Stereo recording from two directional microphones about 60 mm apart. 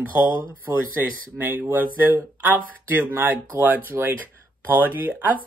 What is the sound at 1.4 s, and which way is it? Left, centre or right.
Speech, right.